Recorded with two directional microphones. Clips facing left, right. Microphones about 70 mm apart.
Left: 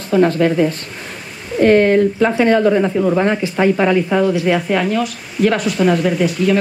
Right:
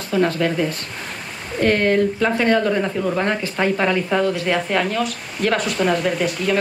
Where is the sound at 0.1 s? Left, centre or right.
Left.